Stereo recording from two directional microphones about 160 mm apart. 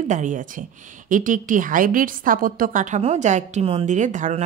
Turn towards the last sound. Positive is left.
turn(degrees=-50)  # may be behind; listen again after turning